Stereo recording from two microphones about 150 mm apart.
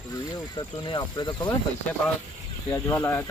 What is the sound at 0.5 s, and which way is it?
Speech, 30° left (ahead or behind).